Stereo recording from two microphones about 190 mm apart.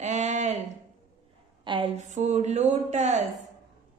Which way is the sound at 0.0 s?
35° right (ahead or behind).